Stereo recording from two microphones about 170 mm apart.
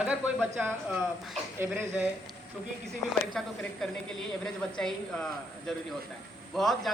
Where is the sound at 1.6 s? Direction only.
15° right (ahead or behind).